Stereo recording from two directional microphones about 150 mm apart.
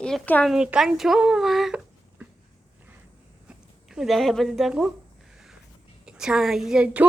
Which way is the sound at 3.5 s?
5° right (ahead or behind).